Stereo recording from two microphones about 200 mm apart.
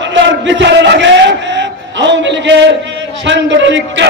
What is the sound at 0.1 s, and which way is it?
Music, 65° right (ahead or behind).